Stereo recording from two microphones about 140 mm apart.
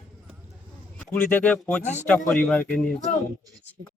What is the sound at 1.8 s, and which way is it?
Speech, 55° left (ahead or behind).